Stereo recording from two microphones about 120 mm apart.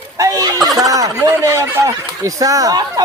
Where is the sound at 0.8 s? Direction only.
30° right (ahead or behind).